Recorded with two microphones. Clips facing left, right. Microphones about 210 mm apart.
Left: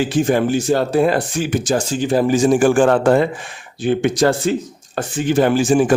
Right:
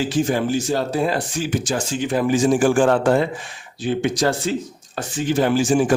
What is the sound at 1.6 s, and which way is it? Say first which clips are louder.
A man's voice: left 4 dB; 40° left (ahead or behind).